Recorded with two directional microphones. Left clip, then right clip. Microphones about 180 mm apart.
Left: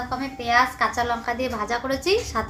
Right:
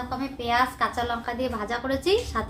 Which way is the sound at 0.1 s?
Centre (ahead or behind).